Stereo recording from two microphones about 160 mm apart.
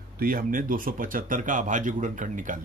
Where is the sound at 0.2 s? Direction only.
65° right (ahead or behind).